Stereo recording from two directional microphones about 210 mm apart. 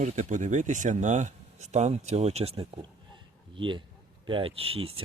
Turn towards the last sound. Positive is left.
turn(degrees=-25)  # may be behind; listen again after turning